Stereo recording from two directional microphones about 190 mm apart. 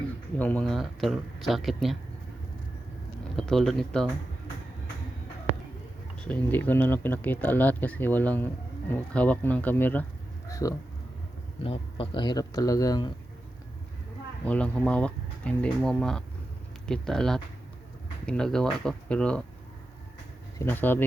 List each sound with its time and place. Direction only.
0.3 s speech: 10° left (ahead or behind)
3.3 s speech: 5° left (ahead or behind)
6.2 s speech: 10° left (ahead or behind)
11.6 s speech: 30° left (ahead or behind)
14.4 s speech: 5° left (ahead or behind)
20.6 s speech: 10° left (ahead or behind)